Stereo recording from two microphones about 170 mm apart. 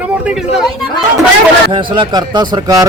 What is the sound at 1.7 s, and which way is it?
Speech, 30° right (ahead or behind).